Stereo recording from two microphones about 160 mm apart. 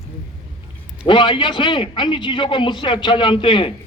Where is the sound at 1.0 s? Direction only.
30° left (ahead or behind).